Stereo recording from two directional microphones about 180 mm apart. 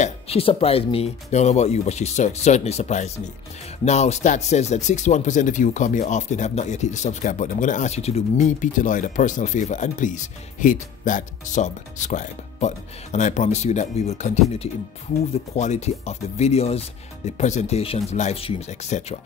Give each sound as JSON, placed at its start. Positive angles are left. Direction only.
{"t": 0.0, "sound": "speech", "side_deg": 35}